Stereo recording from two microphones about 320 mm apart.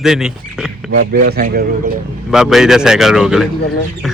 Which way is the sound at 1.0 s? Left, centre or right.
Right.